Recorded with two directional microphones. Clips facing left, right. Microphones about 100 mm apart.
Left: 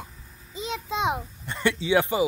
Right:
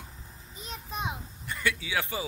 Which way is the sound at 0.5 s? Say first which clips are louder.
Left 9 dB; 90° left.